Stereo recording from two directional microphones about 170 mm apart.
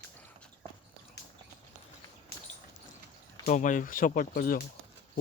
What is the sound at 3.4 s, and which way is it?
Speech, 50° left (ahead or behind).